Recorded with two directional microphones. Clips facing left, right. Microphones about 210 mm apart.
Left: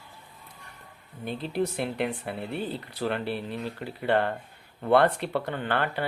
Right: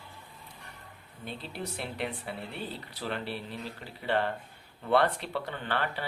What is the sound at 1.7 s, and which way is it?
Speech, 55° left (ahead or behind).